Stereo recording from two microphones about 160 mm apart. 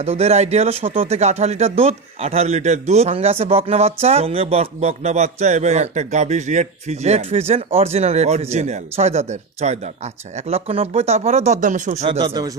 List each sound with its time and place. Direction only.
0.0 s speech: 40° right (ahead or behind)
12.0 s speech: 30° right (ahead or behind)